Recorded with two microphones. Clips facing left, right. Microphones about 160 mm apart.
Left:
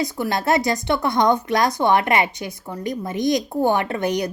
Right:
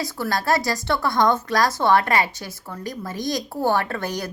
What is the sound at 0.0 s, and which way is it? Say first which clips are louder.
A woman's voice: left 3 dB; 20° left (ahead or behind).